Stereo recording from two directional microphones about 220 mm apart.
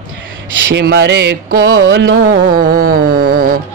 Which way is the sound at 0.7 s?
50° right (ahead or behind).